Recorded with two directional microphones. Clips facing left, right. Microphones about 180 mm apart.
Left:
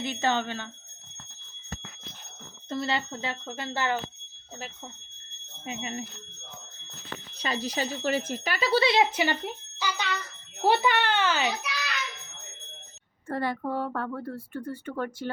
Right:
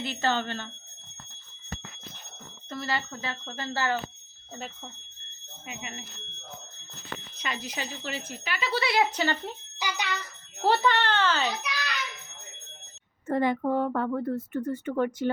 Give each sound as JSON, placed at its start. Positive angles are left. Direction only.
{"t": 0.0, "sound": "a child's voice", "side_deg": 15}
{"t": 2.6, "sound": "speech", "side_deg": 25}
{"t": 5.6, "sound": "speech", "side_deg": 30}
{"t": 7.3, "sound": "speech", "side_deg": 35}
{"t": 9.1, "sound": "a child's voice", "side_deg": 15}
{"t": 9.7, "sound": "a child's voice", "side_deg": -15}
{"t": 10.6, "sound": "a child's voice", "side_deg": 10}
{"t": 13.3, "sound": "speech", "side_deg": -20}